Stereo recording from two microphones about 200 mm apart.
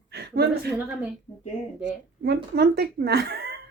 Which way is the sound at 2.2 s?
55° right (ahead or behind).